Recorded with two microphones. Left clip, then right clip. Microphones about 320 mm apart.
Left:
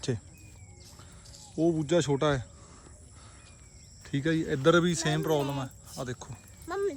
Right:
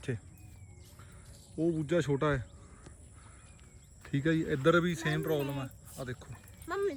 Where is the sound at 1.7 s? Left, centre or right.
Centre.